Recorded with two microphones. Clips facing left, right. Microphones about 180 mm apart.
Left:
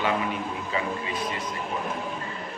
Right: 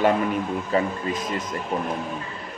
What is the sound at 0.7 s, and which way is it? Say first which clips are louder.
Speech: right 6 dB; 45° right (ahead or behind).